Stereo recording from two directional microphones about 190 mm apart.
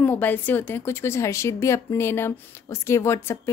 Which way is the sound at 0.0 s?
10° left (ahead or behind).